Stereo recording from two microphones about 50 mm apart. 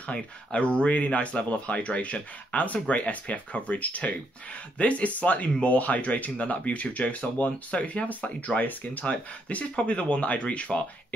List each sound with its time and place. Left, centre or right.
0.0 s speech: left